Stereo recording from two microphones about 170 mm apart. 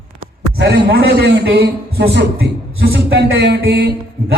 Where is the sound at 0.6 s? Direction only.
75° right (ahead or behind).